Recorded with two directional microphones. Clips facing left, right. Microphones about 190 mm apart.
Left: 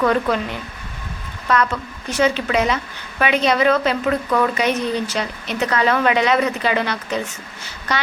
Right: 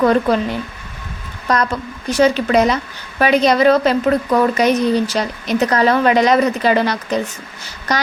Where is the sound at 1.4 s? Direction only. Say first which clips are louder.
Right 2 dB; 40° right (ahead or behind).